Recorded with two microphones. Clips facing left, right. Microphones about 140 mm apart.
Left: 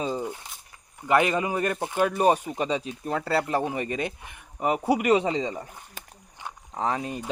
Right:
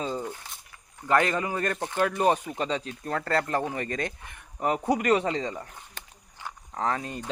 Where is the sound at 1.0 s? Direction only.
15° left (ahead or behind).